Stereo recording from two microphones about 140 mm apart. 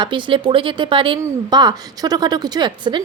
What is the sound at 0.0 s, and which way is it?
A woman's voice, 35° right (ahead or behind).